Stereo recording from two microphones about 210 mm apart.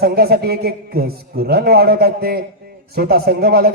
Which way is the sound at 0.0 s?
50° right (ahead or behind).